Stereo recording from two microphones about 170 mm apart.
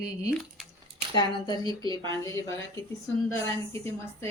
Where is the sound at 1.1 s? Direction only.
25° left (ahead or behind).